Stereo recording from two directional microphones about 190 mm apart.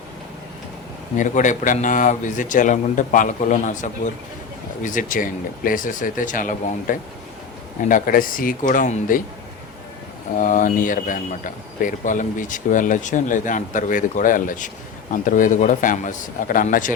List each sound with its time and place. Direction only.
1.1 s speech: 40° left (ahead or behind)
10.4 s speech: 45° left (ahead or behind)